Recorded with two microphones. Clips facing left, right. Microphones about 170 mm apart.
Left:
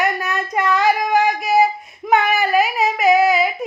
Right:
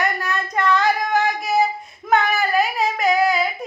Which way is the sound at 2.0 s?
15° left (ahead or behind).